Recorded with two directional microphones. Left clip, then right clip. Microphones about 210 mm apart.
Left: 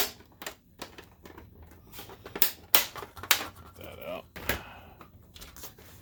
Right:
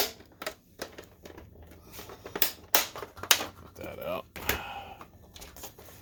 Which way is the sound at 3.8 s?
35° right (ahead or behind).